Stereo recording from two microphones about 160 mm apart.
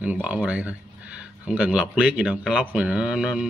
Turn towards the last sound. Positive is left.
turn(degrees=-5)  # may be behind; listen again after turning